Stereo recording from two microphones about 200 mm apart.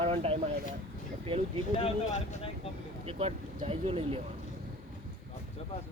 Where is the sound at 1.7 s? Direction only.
35° left (ahead or behind).